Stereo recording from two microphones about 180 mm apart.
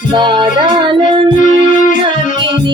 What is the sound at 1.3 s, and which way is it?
Music, 45° left (ahead or behind).